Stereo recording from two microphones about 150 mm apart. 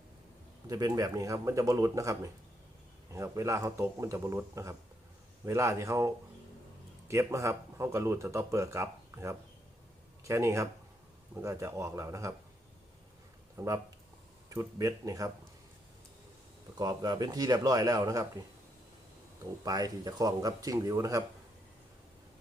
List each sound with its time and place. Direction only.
0.7 s speech: 25° right (ahead or behind)
7.1 s speech: 20° right (ahead or behind)
13.6 s speech: 20° right (ahead or behind)
16.7 s speech: 25° right (ahead or behind)
19.6 s speech: 25° right (ahead or behind)